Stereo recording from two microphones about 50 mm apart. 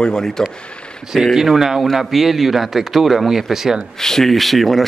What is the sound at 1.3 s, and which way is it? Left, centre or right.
Speech, centre.